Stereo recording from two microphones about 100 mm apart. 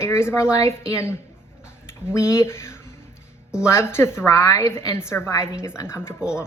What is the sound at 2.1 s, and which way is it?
A woman's voice, 30° left (ahead or behind).